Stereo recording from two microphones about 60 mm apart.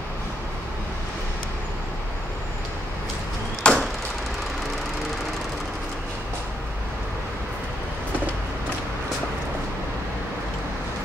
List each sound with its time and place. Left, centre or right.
3.6 s chop: centre